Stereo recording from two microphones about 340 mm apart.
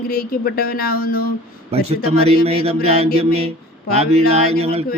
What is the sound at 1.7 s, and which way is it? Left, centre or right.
Speech, centre.